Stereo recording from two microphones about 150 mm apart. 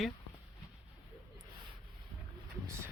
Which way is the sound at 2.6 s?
15° right (ahead or behind).